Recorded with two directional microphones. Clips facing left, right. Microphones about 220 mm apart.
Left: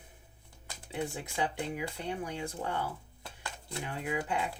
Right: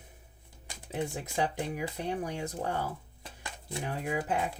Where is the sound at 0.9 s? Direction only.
40° right (ahead or behind).